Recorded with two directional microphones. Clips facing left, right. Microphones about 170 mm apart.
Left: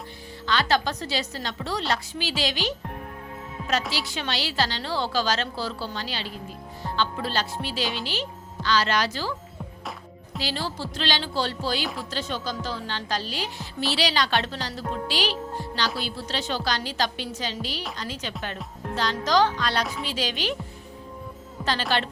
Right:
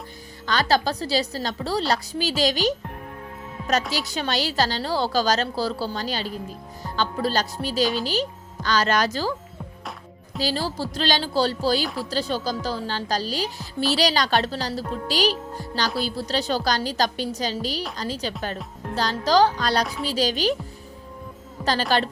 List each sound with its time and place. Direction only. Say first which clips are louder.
0.4 s a woman's voice: right 2 dB; 40° right (ahead or behind)
3.9 s a woman's voice: right 4 dB; 40° right (ahead or behind)
10.3 s a woman's voice: right 5 dB; 40° right (ahead or behind)
21.6 s a woman's voice: right 4 dB; 40° right (ahead or behind)